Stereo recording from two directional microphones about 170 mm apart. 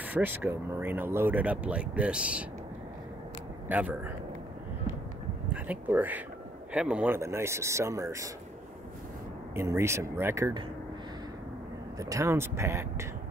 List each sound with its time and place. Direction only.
0.0 s speech: 10° right (ahead or behind)
3.6 s speech: 10° right (ahead or behind)
5.5 s speech: 10° right (ahead or behind)
9.6 s speech: 15° right (ahead or behind)
12.0 s speech: 20° right (ahead or behind)